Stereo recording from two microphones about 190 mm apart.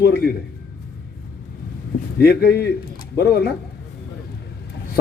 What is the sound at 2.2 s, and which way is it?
A man's voice, 55° left (ahead or behind).